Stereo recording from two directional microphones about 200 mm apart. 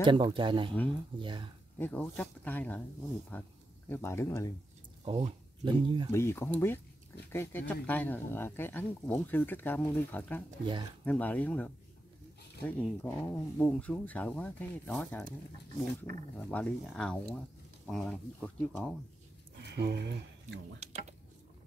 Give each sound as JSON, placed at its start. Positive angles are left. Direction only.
{"t": 0.0, "sound": "speech", "side_deg": -25}
{"t": 1.8, "sound": "speech", "side_deg": 5}
{"t": 5.0, "sound": "speech", "side_deg": -25}
{"t": 6.1, "sound": "speech", "side_deg": 15}
{"t": 10.6, "sound": "speech", "side_deg": -25}
{"t": 11.1, "sound": "speech", "side_deg": 10}
{"t": 16.3, "sound": "speech", "side_deg": 5}
{"t": 19.7, "sound": "speech", "side_deg": -55}
{"t": 20.8, "sound": "speech", "side_deg": -35}